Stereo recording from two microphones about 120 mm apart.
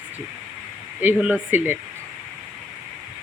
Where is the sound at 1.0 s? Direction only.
15° right (ahead or behind).